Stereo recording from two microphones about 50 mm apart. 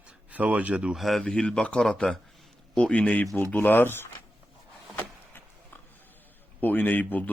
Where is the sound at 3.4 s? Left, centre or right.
Left.